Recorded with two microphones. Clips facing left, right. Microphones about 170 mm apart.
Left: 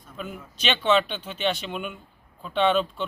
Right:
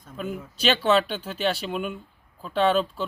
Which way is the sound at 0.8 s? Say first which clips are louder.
Left 3 dB; centre (ahead or behind).